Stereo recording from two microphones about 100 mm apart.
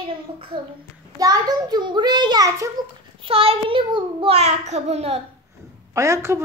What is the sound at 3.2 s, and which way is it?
A child's voice, 70° right (ahead or behind).